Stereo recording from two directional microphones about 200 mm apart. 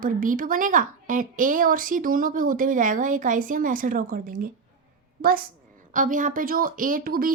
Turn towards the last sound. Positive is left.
turn(degrees=-45)  # may be behind; listen again after turning